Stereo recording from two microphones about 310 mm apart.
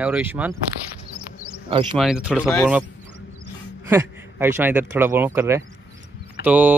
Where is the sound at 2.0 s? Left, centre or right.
Centre.